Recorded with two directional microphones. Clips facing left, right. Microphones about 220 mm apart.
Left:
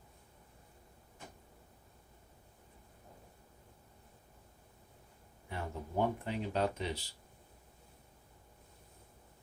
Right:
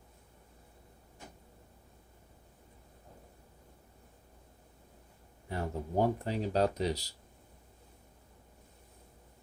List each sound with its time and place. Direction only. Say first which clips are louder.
5.5 s speech: right 5 dB; 40° right (ahead or behind)